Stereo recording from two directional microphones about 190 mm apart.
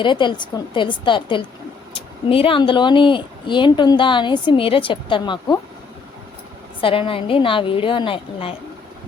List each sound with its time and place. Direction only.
0.0 s speech: 25° left (ahead or behind)
6.8 s speech: 30° left (ahead or behind)